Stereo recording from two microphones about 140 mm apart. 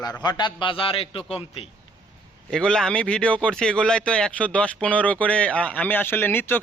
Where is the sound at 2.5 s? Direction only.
5° left (ahead or behind).